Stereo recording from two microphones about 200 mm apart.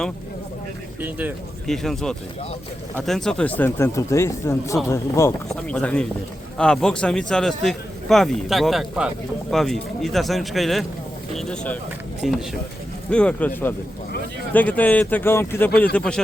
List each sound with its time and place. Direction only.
1.6 s speech: centre (ahead or behind)